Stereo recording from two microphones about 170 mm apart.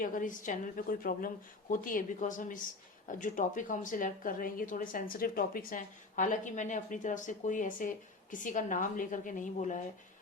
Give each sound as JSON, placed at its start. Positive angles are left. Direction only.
{"t": 0.0, "sound": "a woman's voice", "side_deg": 50}